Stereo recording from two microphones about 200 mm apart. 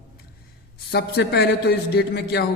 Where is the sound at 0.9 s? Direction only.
55° left (ahead or behind).